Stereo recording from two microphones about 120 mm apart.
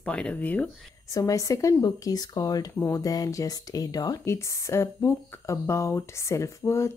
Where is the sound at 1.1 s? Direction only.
30° left (ahead or behind).